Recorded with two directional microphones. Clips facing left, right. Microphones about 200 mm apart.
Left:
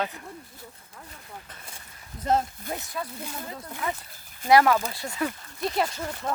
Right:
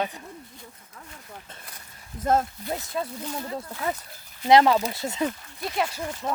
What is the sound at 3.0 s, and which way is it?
Speech, 30° right (ahead or behind).